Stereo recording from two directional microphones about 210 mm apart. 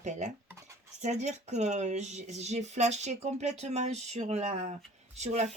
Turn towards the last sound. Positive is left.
turn(degrees=-35)  # may be behind; listen again after turning